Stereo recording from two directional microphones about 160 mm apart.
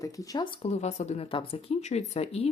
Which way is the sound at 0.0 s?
20° left (ahead or behind).